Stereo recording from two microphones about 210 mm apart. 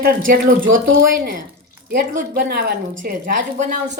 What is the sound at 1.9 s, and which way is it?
A woman's voice, 45° right (ahead or behind).